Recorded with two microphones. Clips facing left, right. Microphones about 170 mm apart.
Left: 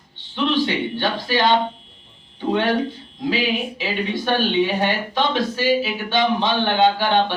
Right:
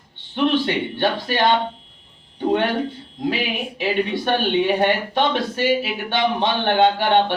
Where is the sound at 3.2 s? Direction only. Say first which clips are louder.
Left 2 dB; 60° right (ahead or behind).